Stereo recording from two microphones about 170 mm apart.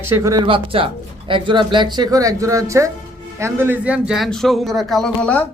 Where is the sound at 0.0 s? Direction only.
15° right (ahead or behind).